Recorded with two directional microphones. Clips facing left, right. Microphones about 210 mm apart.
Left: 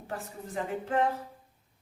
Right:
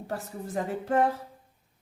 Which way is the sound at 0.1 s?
40° right (ahead or behind).